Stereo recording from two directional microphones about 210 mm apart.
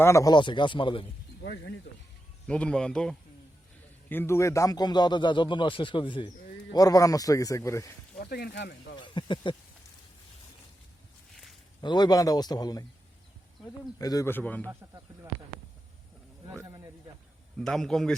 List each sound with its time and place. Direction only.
0.0 s speech: 15° left (ahead or behind)
1.9 s speech: 50° left (ahead or behind)
2.5 s speech: 5° left (ahead or behind)
8.2 s speech: 45° left (ahead or behind)
9.0 s speech: 20° left (ahead or behind)
11.8 s speech: 20° left (ahead or behind)
14.0 s speech: 15° left (ahead or behind)
14.7 s speech: 15° right (ahead or behind)
16.5 s a sound: 15° right (ahead or behind)
17.6 s speech: 5° left (ahead or behind)